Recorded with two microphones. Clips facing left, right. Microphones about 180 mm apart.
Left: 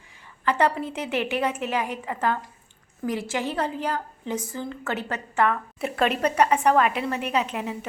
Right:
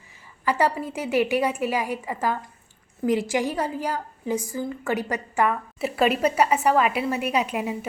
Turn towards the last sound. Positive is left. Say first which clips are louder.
# right 2 dB
turn(degrees=-10)  # may be behind; listen again after turning